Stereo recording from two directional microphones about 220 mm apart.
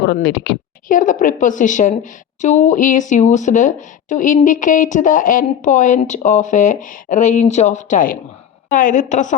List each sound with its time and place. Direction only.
0.0 s speech: 50° left (ahead or behind); by 9.3 s 35° left (ahead or behind)